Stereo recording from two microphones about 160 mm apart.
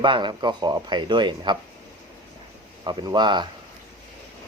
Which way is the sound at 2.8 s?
25° right (ahead or behind).